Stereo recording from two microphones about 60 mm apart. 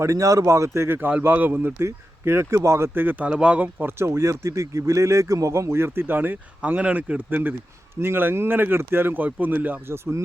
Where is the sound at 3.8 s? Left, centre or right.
Right.